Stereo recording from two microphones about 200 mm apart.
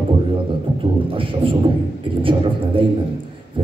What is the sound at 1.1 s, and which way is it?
A man's voice, 25° right (ahead or behind).